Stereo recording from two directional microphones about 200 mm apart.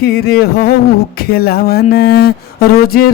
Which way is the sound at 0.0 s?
50° left (ahead or behind).